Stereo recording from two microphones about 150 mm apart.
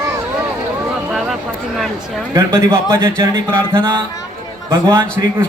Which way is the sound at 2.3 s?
20° right (ahead or behind).